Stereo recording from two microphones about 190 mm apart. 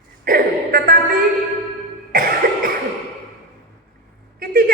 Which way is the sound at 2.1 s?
50° right (ahead or behind).